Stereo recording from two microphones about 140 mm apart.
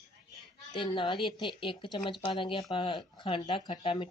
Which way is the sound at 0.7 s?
40° left (ahead or behind).